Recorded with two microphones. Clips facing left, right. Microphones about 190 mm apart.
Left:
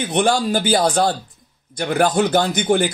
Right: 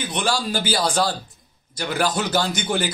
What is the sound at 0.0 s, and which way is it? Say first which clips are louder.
A man's voice: left 6 dB; 55° left (ahead or behind).